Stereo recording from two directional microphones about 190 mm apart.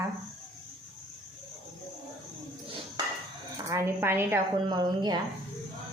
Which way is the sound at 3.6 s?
15° right (ahead or behind).